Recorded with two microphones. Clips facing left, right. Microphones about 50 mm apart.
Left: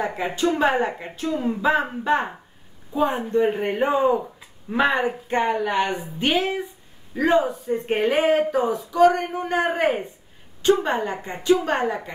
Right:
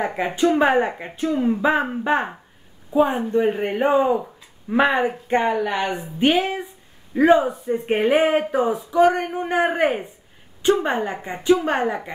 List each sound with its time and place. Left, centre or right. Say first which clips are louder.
0.0 s speech: right 3 dB; right
3.4 s speech: right 2 dB; centre
4.1 s a sound: right 1 dB; centre
4.7 s speech: right 2 dB; centre
11.3 s speech: right 2 dB; centre
11.6 s speech: right 1 dB; centre